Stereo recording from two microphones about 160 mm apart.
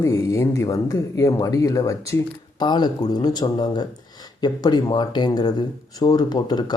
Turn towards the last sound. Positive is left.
turn(degrees=25)  # may be behind; listen again after turning